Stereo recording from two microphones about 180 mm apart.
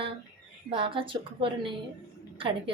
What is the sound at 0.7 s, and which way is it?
A woman's voice, 30° right (ahead or behind).